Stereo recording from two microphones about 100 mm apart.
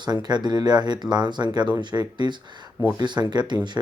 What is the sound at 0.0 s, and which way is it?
Speech, 45° right (ahead or behind).